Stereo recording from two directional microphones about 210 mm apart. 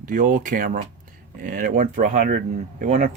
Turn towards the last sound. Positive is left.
turn(degrees=-35)  # may be behind; listen again after turning